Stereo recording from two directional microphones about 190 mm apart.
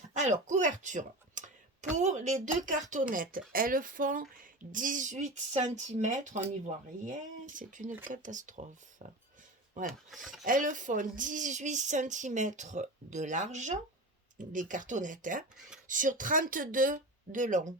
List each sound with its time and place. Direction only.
0.1 s speech: 40° right (ahead or behind)
9.8 s speech: centre (ahead or behind)
10.4 s speech: 45° right (ahead or behind)